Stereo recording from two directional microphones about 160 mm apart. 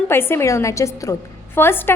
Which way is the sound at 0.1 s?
15° left (ahead or behind).